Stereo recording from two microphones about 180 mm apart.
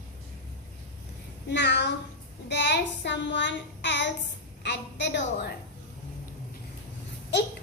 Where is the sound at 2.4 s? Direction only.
75° left (ahead or behind).